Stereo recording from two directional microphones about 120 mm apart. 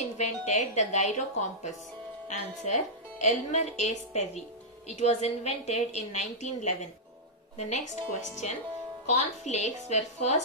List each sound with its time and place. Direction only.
0.2 s a woman's voice: 75° left (ahead or behind)
2.2 s a woman's voice: 85° left